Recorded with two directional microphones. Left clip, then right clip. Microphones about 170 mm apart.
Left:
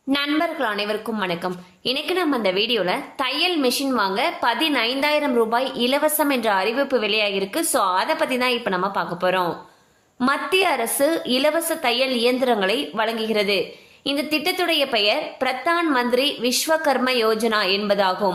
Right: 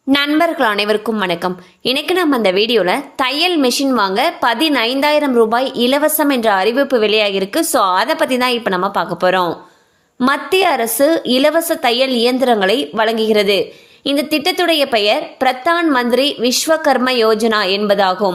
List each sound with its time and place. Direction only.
0.1 s a woman's voice: 55° right (ahead or behind)